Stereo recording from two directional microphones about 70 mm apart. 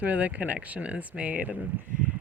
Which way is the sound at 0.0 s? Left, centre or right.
Right.